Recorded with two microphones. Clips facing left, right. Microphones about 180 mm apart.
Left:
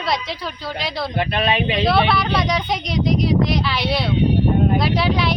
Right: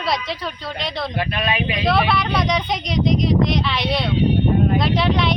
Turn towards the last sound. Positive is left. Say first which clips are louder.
# even
turn(degrees=5)  # may be behind; listen again after turning